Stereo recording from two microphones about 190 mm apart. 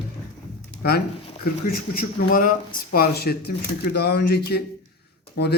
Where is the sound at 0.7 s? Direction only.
55° left (ahead or behind).